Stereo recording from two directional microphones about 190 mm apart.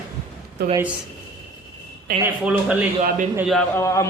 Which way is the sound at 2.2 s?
5° right (ahead or behind).